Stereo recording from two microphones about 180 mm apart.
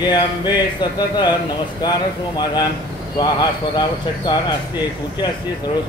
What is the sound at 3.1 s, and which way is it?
Speech, 20° left (ahead or behind).